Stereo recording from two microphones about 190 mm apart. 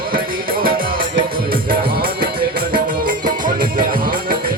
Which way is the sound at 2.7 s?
45° right (ahead or behind).